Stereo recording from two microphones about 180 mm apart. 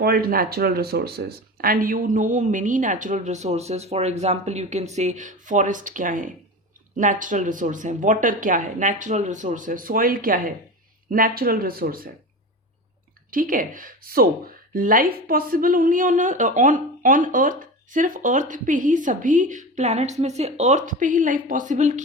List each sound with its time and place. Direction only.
0.0 s speech: 55° right (ahead or behind)
13.3 s speech: 50° right (ahead or behind)